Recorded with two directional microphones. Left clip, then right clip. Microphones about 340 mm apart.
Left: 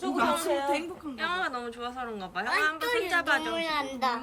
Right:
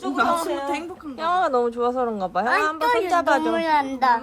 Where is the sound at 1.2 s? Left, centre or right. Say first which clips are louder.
Right 11 dB; centre.